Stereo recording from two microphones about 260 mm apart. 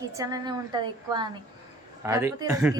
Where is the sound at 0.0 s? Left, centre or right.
Centre.